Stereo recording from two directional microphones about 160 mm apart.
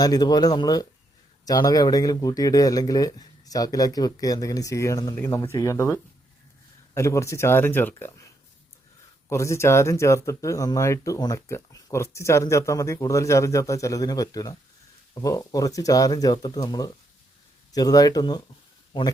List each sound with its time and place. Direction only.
0.0 s speech: 25° left (ahead or behind)
9.3 s speech: 20° left (ahead or behind)